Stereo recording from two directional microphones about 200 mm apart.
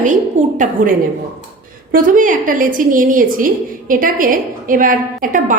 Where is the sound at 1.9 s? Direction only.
40° right (ahead or behind).